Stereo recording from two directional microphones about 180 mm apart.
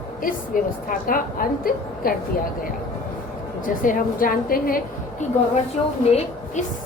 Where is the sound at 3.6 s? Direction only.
50° left (ahead or behind).